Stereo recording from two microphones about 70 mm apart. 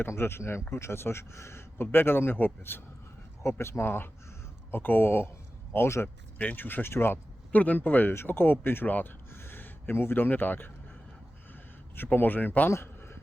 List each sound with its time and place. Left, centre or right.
0.0 s speech: left
12.1 s speech: left